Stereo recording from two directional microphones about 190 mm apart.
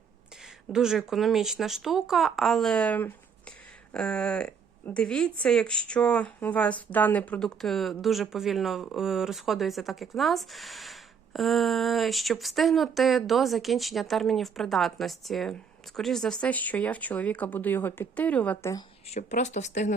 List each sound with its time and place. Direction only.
0.7 s speech: 5° right (ahead or behind); by 18.8 s 15° left (ahead or behind)
19.1 s speech: 40° left (ahead or behind)